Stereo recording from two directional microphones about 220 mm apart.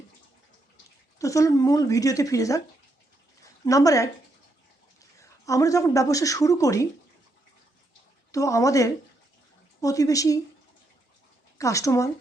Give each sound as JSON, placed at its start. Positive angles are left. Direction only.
{"t": 1.2, "sound": "a woman's voice", "side_deg": 15}
{"t": 3.7, "sound": "a woman's voice", "side_deg": 15}
{"t": 5.2, "sound": "a woman's voice", "side_deg": 15}
{"t": 8.3, "sound": "a woman's voice", "side_deg": 15}
{"t": 11.5, "sound": "a woman's voice", "side_deg": 15}